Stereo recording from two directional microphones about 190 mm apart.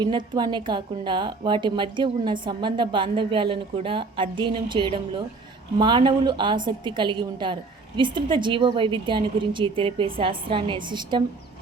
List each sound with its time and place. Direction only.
0.0 s a woman's voice: 25° right (ahead or behind)